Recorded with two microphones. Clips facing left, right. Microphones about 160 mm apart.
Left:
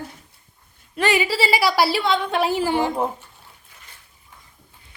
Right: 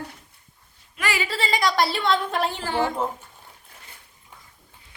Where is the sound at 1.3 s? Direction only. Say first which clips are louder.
Left 4 dB; 5° left (ahead or behind).